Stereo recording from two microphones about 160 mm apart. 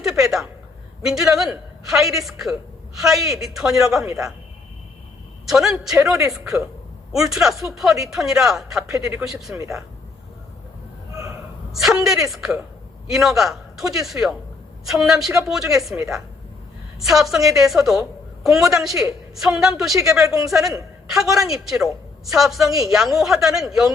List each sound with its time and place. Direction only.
0.0 s a woman's voice: centre (ahead or behind)
5.5 s speech: centre (ahead or behind)
7.3 s speech: centre (ahead or behind)
9.6 s speech: 20° right (ahead or behind)
11.7 s speech: centre (ahead or behind)